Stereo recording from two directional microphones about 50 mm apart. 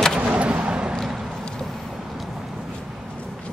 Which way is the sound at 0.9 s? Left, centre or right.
Centre.